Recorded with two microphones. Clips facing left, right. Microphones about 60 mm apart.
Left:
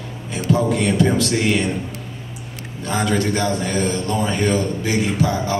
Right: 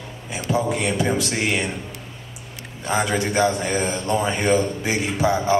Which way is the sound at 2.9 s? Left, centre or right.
Centre.